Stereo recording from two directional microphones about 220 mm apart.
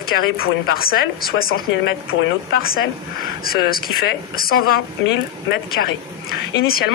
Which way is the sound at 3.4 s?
40° left (ahead or behind).